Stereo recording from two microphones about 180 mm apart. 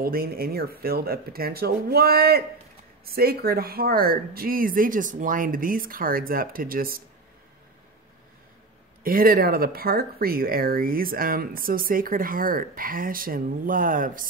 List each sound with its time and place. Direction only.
0.0 s speech: 55° right (ahead or behind)
9.0 s speech: 55° right (ahead or behind)